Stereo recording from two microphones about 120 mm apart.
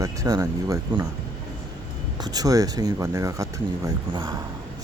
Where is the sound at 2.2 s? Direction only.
30° right (ahead or behind).